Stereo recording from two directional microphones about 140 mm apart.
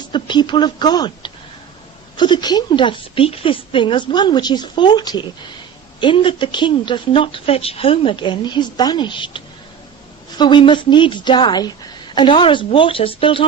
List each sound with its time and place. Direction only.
0.1 s a woman's voice: 35° left (ahead or behind)